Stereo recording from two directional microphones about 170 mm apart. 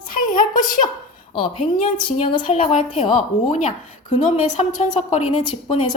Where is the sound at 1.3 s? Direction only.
30° left (ahead or behind).